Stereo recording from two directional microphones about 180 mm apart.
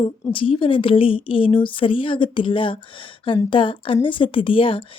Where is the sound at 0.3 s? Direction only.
30° left (ahead or behind).